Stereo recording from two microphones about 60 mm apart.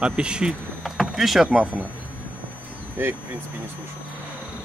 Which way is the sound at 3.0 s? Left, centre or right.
Right.